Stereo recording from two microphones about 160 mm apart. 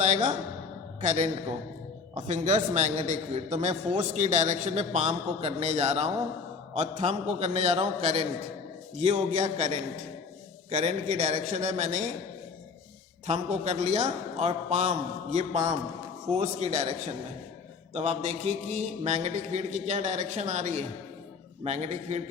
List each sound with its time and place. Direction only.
0.0 s a man's voice: 50° right (ahead or behind)
13.2 s a man's voice: 45° right (ahead or behind)
17.9 s a man's voice: 45° right (ahead or behind)